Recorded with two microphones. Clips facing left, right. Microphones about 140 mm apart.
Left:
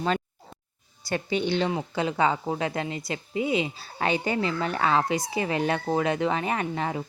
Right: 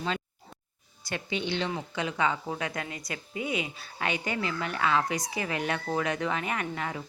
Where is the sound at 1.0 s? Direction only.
40° left (ahead or behind).